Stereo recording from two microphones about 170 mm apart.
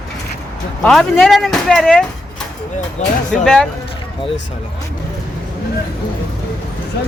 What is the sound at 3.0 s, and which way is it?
Speech, 45° left (ahead or behind).